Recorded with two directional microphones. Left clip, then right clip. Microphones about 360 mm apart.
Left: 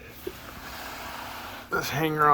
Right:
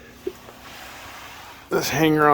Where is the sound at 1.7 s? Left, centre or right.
Right.